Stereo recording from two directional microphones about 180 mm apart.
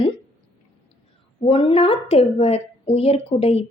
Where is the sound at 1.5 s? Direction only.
30° left (ahead or behind).